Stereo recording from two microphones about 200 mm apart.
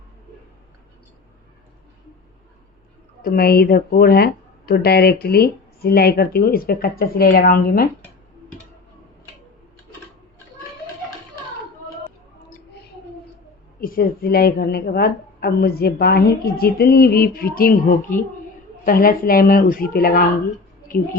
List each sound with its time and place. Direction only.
3.2 s speech: 50° left (ahead or behind)
13.8 s speech: 45° left (ahead or behind)